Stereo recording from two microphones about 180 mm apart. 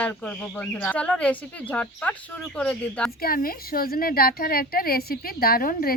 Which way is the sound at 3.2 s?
55° left (ahead or behind).